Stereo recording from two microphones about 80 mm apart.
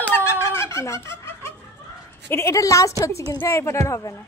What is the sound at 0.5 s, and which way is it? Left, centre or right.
Fowl, left.